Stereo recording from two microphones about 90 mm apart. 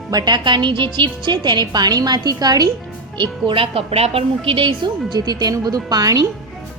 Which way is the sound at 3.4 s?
75° right (ahead or behind).